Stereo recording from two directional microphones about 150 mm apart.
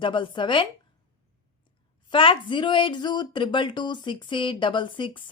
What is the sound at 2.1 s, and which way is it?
Speech, 35° left (ahead or behind).